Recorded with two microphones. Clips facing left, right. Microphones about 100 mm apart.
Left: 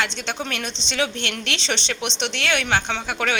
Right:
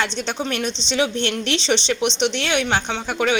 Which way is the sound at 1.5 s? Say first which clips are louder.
Right 6 dB; 45° left (ahead or behind).